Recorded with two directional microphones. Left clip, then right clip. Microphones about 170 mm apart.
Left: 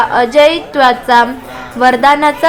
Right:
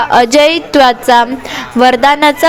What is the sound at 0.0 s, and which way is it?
A woman's voice, 50° right (ahead or behind).